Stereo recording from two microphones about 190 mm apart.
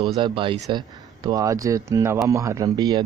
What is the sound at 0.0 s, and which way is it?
Speech, 30° right (ahead or behind).